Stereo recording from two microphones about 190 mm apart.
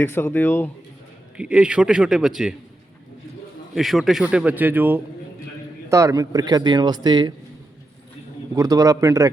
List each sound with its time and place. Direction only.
0.0 s speech: 10° left (ahead or behind)
1.4 s a man's voice: 5° right (ahead or behind)
3.8 s speech: centre (ahead or behind); by 7.3 s 20° right (ahead or behind)
8.5 s speech: 20° right (ahead or behind)